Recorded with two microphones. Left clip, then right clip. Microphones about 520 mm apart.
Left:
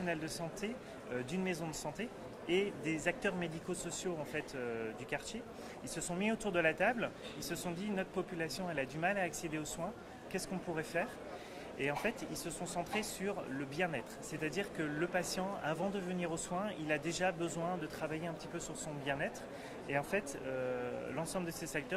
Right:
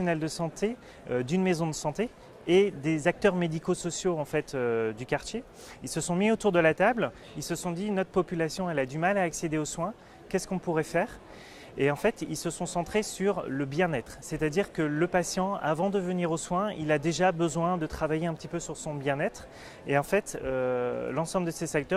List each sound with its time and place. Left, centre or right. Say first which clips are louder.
0.0 s speech: right 9 dB; right